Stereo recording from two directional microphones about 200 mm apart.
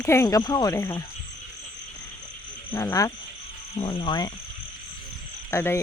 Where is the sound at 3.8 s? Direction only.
25° left (ahead or behind).